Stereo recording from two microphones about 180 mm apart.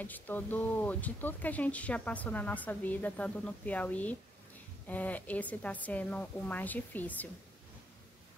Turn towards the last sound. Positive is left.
turn(degrees=10)  # may be behind; listen again after turning